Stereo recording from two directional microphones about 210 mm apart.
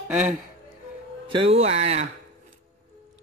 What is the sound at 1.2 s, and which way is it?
Speech, 25° right (ahead or behind).